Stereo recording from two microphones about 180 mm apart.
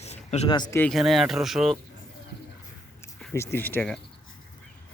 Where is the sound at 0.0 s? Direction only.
35° left (ahead or behind).